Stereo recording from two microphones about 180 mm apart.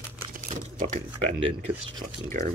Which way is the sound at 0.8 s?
40° right (ahead or behind).